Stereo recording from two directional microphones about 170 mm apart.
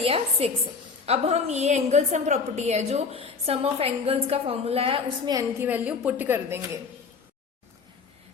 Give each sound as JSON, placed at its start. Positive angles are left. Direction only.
{"t": 0.0, "sound": "a woman's voice", "side_deg": -35}